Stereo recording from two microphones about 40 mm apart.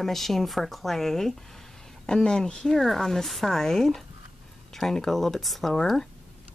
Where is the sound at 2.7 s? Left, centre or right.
Centre.